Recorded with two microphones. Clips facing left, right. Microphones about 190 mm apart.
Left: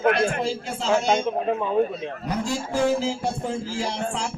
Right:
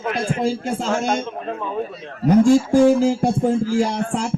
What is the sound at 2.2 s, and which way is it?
A man's voice, 50° right (ahead or behind).